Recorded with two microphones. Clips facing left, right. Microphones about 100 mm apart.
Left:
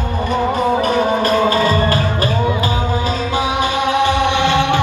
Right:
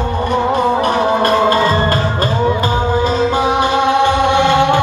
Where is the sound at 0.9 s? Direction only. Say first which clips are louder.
Right 2 dB; 50° right (ahead or behind).